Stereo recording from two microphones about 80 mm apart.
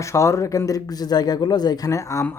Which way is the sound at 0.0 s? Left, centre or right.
Left.